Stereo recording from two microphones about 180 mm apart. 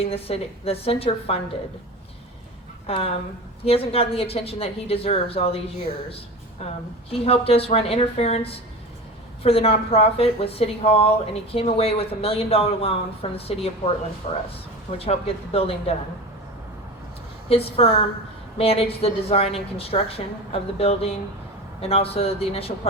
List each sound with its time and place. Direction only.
0.0 s a woman's voice: 35° left (ahead or behind)
2.8 s a woman's voice: 35° left (ahead or behind)
7.1 s a woman's voice: 35° left (ahead or behind)
17.5 s a woman's voice: 35° left (ahead or behind)